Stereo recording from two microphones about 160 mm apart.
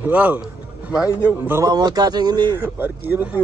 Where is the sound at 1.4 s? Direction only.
15° right (ahead or behind).